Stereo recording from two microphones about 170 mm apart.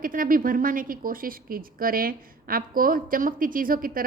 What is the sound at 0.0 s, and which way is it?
A woman's voice, 55° right (ahead or behind).